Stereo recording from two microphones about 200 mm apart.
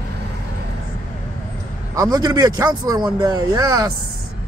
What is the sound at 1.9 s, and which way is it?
Speech, 20° right (ahead or behind).